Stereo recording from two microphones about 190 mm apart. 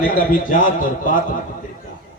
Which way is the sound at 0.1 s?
45° left (ahead or behind).